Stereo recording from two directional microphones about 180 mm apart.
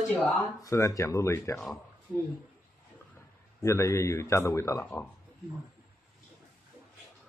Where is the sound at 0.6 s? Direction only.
15° left (ahead or behind).